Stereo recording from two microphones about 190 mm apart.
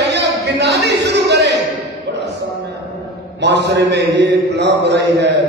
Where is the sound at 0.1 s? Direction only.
65° right (ahead or behind).